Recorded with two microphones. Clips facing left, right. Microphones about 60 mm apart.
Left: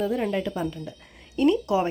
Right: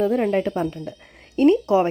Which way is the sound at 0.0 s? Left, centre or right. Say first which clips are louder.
Right 6 dB; right.